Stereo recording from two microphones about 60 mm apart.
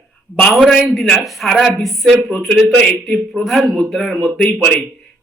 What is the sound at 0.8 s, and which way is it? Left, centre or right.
A man's voice, centre.